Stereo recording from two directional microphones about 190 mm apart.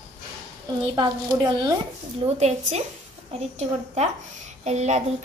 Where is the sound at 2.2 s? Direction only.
35° right (ahead or behind).